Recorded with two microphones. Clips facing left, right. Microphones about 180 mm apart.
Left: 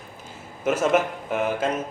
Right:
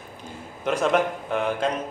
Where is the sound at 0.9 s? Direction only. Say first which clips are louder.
Even; 5° left (ahead or behind).